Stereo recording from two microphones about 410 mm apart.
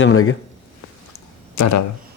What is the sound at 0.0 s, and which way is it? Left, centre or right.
Speech, left.